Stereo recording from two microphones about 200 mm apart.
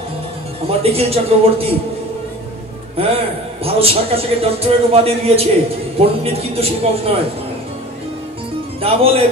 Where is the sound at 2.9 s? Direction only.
30° right (ahead or behind).